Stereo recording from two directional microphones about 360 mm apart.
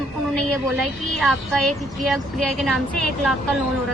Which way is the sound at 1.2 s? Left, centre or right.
Centre.